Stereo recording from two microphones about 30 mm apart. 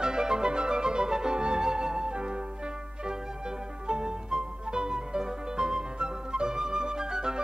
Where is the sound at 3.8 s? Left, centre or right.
Right.